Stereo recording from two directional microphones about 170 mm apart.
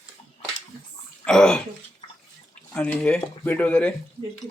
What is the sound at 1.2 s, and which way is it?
Speech, 5° left (ahead or behind).